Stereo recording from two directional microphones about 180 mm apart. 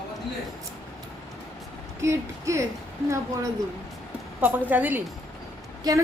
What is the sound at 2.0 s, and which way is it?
Speech, 15° right (ahead or behind).